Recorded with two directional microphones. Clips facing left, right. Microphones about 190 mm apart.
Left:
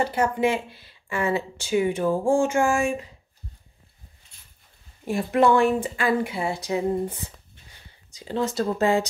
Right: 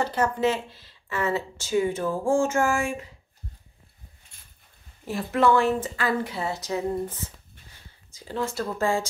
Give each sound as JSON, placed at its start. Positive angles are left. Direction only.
{"t": 0.0, "sound": "speech", "side_deg": 10}
{"t": 5.0, "sound": "speech", "side_deg": 15}
{"t": 8.2, "sound": "speech", "side_deg": 20}